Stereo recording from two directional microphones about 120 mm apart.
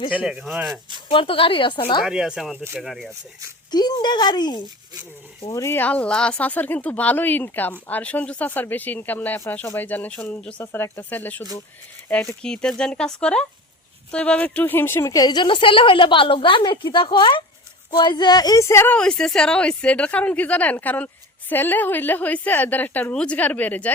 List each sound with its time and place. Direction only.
0.1 s speech: 10° right (ahead or behind)
1.1 s a woman's voice: 50° left (ahead or behind)
2.0 s speech: 5° right (ahead or behind)
3.7 s speech: 35° left (ahead or behind)
5.5 s speech: 25° left (ahead or behind)
10.6 s speech: 20° left (ahead or behind)
12.4 s speech: 5° left (ahead or behind)
15.1 s a woman's voice: 35° left (ahead or behind)
18.9 s speech: 5° left (ahead or behind)